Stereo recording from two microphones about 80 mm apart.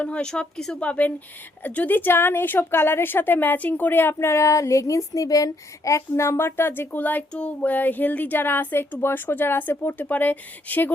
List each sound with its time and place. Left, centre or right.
0.0 s a woman's voice: centre